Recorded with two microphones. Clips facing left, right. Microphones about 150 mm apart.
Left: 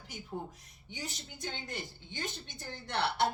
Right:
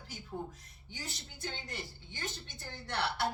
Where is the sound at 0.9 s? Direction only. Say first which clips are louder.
Left 3 dB; 20° left (ahead or behind).